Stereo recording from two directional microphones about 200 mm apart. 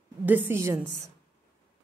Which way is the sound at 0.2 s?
10° right (ahead or behind).